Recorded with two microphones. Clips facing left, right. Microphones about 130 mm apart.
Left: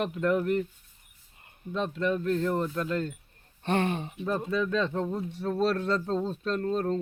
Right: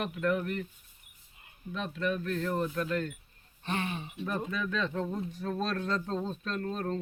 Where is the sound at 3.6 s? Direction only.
50° left (ahead or behind).